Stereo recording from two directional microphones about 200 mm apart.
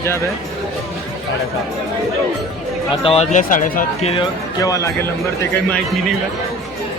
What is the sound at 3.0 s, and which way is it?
Speech, 30° left (ahead or behind).